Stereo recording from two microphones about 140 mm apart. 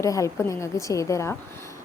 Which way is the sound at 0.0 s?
20° left (ahead or behind).